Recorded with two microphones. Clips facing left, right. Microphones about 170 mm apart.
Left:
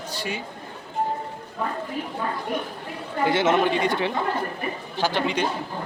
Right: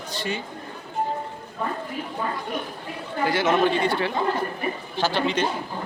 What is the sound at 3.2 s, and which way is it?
A man's voice, 25° left (ahead or behind).